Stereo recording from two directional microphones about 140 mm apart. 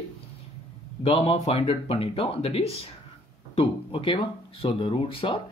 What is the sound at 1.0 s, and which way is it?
Speech, 45° left (ahead or behind).